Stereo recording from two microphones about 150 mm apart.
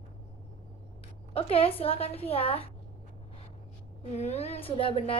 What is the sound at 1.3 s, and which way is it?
A woman's voice, 40° left (ahead or behind).